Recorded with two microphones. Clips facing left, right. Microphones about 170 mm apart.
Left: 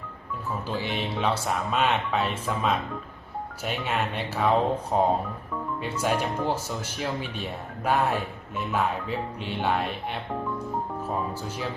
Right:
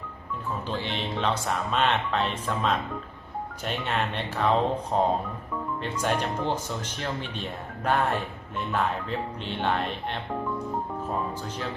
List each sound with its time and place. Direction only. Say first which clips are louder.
0.7 s speech: left 2 dB; 10° left (ahead or behind)